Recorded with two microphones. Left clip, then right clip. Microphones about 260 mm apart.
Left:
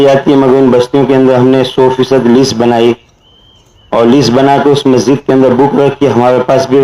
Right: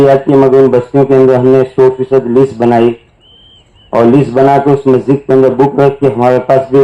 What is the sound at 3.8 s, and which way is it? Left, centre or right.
A man's voice, left.